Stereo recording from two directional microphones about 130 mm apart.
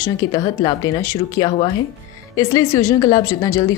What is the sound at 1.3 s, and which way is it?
A woman's voice, 30° left (ahead or behind).